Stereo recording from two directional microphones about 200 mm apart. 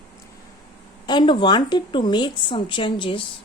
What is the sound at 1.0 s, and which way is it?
Speech, 20° left (ahead or behind).